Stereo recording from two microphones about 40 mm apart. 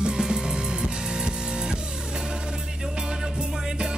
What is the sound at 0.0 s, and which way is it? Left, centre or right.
Music, right.